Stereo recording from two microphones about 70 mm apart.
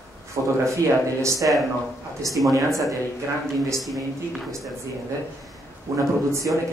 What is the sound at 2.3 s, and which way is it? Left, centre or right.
Speech, centre.